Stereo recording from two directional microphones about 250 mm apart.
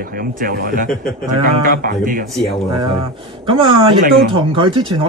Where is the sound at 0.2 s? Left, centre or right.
Right.